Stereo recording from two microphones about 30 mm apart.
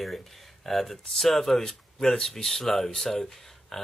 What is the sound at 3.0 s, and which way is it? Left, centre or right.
Speech, centre.